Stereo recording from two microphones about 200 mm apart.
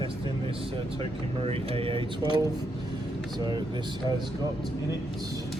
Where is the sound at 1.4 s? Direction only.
30° right (ahead or behind).